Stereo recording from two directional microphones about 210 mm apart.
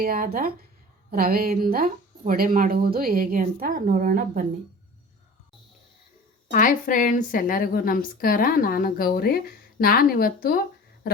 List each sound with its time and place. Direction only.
0.0 s speech: 45° right (ahead or behind)
6.5 s a woman's voice: 40° left (ahead or behind)